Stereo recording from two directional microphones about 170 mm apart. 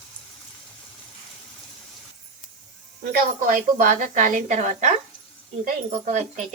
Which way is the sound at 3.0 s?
55° right (ahead or behind).